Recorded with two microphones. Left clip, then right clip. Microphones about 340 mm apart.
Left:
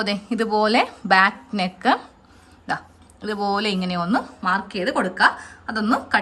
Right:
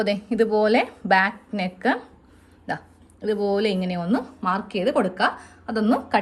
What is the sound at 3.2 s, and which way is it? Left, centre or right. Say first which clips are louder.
Speech: even; centre.